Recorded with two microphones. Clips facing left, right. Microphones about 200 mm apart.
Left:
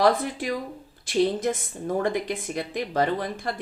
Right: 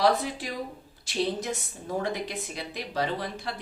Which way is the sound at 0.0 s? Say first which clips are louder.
Left 3 dB; 50° left (ahead or behind).